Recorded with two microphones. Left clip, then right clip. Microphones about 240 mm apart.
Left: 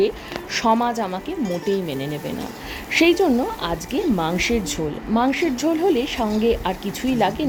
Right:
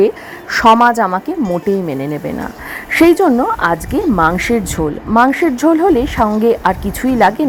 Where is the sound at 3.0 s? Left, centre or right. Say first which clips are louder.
Right 7 dB; centre.